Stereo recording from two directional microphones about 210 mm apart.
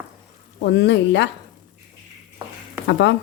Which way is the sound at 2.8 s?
55° left (ahead or behind).